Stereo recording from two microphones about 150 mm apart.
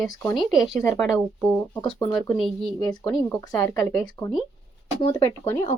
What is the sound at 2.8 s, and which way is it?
Speech, 25° left (ahead or behind).